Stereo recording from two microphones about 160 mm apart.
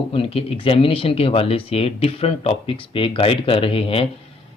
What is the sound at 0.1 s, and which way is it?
Speech, 35° left (ahead or behind).